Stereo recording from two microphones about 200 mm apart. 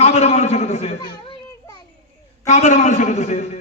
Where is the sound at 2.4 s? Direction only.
35° left (ahead or behind).